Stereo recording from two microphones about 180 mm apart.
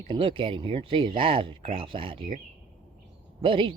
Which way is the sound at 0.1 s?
30° right (ahead or behind).